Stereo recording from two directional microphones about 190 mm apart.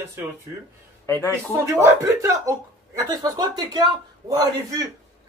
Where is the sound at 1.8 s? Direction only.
15° right (ahead or behind).